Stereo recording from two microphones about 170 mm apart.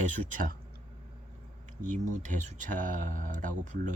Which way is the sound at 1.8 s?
50° right (ahead or behind).